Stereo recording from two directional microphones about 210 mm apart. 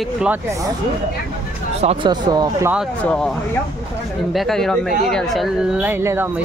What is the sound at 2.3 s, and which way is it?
Speech, 20° right (ahead or behind).